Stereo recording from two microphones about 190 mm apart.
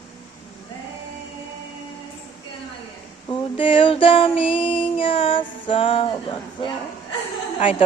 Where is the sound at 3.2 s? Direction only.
25° left (ahead or behind).